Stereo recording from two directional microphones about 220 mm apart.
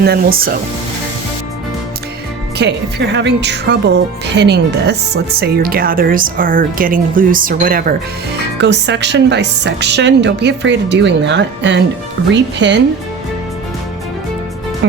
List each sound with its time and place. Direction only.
0.0 s speech: 45° right (ahead or behind)
2.6 s speech: 50° right (ahead or behind)
8.5 s speech: 50° right (ahead or behind)